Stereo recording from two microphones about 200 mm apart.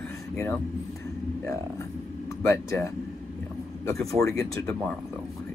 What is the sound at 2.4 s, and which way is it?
Speech, 15° left (ahead or behind).